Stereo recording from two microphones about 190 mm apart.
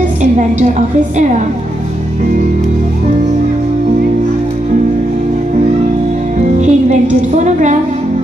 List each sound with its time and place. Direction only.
0.2 s a woman's voice: 40° right (ahead or behind)
6.6 s a woman's voice: 40° right (ahead or behind)